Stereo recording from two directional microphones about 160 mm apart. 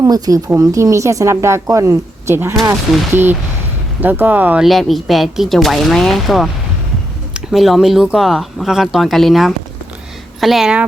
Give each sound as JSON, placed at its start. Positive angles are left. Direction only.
{"t": 0.0, "sound": "speech", "side_deg": -20}
{"t": 2.9, "sound": "speech", "side_deg": 0}
{"t": 4.0, "sound": "speech", "side_deg": -10}